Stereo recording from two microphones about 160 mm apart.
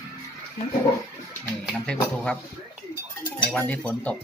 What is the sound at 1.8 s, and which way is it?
Speech, 5° left (ahead or behind).